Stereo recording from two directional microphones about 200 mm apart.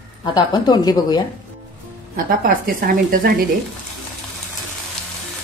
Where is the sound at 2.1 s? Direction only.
45° right (ahead or behind).